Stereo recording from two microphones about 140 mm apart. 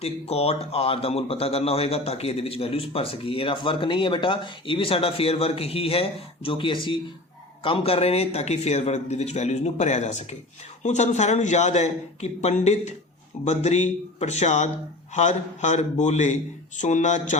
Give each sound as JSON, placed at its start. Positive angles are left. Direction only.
{"t": 0.0, "sound": "a man's voice", "side_deg": 45}